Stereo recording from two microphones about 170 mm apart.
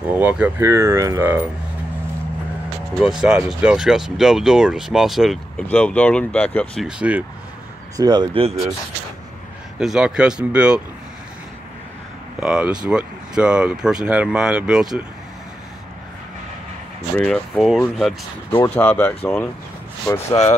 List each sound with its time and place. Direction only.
0.1 s speech: 10° right (ahead or behind)
2.9 s speech: centre (ahead or behind)
8.0 s speech: 25° right (ahead or behind)
9.8 s speech: 5° right (ahead or behind)
12.4 s speech: 5° right (ahead or behind)
17.2 s speech: centre (ahead or behind)
18.5 s speech: 10° left (ahead or behind)